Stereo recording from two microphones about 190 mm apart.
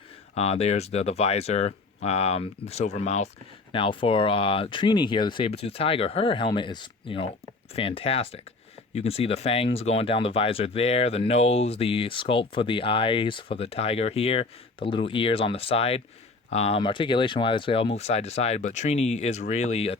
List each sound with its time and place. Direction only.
0.3 s speech: 35° left (ahead or behind)